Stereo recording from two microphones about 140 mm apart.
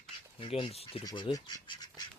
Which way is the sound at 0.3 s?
40° left (ahead or behind).